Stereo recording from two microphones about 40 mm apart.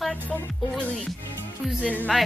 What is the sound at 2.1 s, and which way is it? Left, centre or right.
Speech, centre.